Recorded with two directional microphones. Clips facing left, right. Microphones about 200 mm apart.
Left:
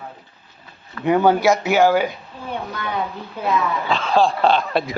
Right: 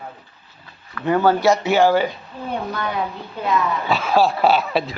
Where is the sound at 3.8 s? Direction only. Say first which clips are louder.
Even; 10° right (ahead or behind).